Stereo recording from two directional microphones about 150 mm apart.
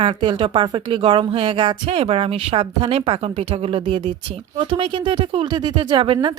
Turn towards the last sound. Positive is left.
turn(degrees=-35)  # may be behind; listen again after turning